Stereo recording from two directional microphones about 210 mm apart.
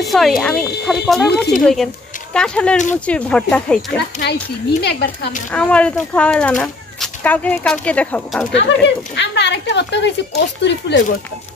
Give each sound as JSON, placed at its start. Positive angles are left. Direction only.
{"t": 0.0, "sound": "speech", "side_deg": 0}
{"t": 4.8, "sound": "speech", "side_deg": 50}
{"t": 5.5, "sound": "speech", "side_deg": 5}
{"t": 8.5, "sound": "speech", "side_deg": 55}